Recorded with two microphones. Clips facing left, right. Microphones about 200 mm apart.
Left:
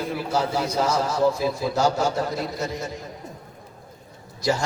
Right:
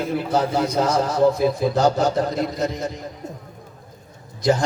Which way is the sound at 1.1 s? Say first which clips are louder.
Right 4 dB; 20° right (ahead or behind).